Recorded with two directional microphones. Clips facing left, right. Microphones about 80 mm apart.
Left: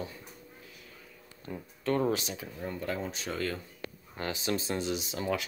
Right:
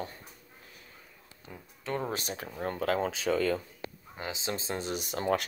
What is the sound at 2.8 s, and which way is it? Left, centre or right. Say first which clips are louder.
Speech: right 7 dB; right.